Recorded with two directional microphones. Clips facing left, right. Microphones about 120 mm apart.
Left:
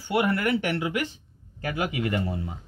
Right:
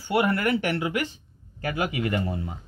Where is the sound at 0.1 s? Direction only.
40° right (ahead or behind).